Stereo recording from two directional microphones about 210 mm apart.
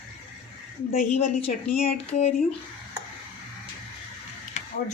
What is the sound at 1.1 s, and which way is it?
A woman's voice, 30° left (ahead or behind).